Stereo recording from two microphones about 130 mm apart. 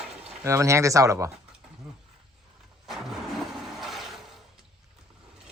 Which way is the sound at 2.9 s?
Centre (ahead or behind).